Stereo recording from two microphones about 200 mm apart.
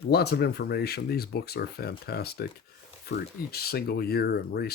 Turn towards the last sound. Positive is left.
turn(degrees=50)  # may be behind; listen again after turning